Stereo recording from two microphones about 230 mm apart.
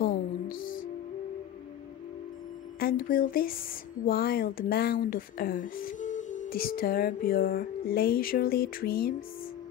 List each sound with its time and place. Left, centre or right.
0.0 s music: left
2.8 s speech: left